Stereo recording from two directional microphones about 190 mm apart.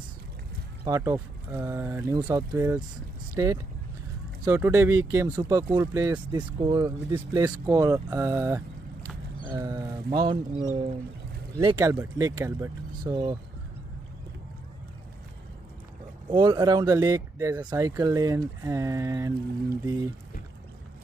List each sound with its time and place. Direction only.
0.8 s speech: 15° right (ahead or behind)
4.5 s speech: 10° right (ahead or behind); by 11.0 s 35° right (ahead or behind)
11.5 s speech: 20° right (ahead or behind)
16.3 s speech: 20° right (ahead or behind)